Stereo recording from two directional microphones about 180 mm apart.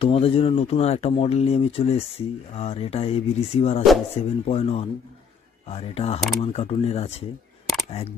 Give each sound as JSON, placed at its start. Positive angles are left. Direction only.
{"t": 0.0, "sound": "speech", "side_deg": 30}